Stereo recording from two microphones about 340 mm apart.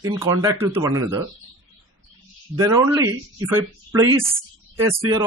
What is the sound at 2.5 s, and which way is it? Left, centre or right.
Speech, centre.